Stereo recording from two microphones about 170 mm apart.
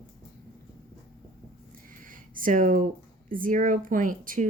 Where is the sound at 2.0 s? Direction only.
55° right (ahead or behind).